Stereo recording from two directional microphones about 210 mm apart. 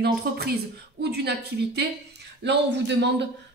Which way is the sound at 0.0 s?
50° right (ahead or behind).